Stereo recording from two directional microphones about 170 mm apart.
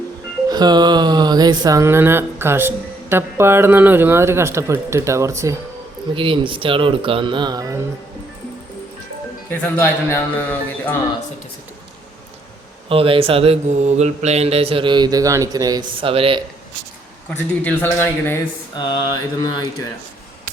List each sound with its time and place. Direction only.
0.5 s speech: 25° right (ahead or behind)
6.1 s mantra: 30° right (ahead or behind)
9.5 s speech: 10° left (ahead or behind)
12.9 s mantra: 35° right (ahead or behind)
17.2 s speech: 10° left (ahead or behind)
18.8 s mantra: 25° left (ahead or behind)